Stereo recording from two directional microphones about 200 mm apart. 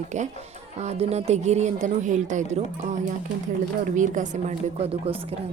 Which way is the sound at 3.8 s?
40° right (ahead or behind).